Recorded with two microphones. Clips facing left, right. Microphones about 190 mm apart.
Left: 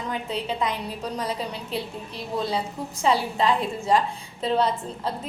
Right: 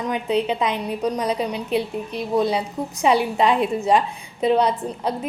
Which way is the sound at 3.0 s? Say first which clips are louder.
Right 4 dB; 20° right (ahead or behind).